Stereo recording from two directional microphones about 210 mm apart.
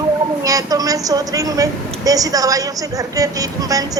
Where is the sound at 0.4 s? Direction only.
15° right (ahead or behind).